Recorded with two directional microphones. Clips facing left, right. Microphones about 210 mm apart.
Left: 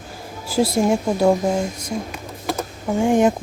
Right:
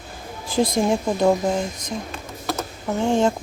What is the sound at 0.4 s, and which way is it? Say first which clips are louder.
Speech: left 2 dB; 5° left (ahead or behind).